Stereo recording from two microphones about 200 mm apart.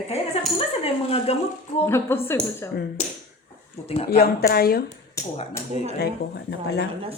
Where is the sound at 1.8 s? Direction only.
10° left (ahead or behind).